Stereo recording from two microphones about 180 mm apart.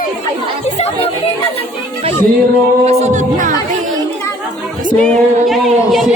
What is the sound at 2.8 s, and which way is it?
Music, 35° right (ahead or behind).